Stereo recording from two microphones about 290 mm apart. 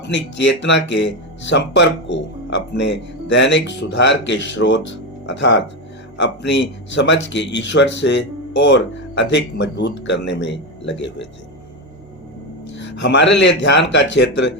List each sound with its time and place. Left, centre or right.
0.1 s speech: left
12.7 s speech: left